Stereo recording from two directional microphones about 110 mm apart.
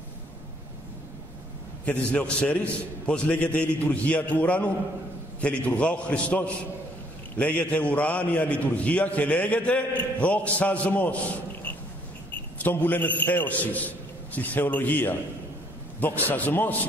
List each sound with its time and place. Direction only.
1.9 s a man's voice: 10° left (ahead or behind)
12.5 s a man's voice: 15° left (ahead or behind)